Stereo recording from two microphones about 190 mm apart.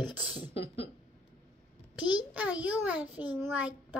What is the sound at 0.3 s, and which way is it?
Beatboxing, 25° left (ahead or behind).